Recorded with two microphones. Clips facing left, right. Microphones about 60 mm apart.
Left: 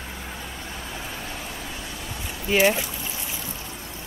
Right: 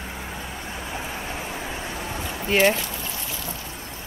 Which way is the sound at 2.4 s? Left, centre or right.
Centre.